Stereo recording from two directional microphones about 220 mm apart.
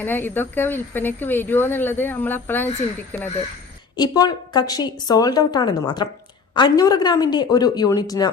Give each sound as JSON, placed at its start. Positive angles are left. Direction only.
{"t": 0.0, "sound": "a woman's voice", "side_deg": 10}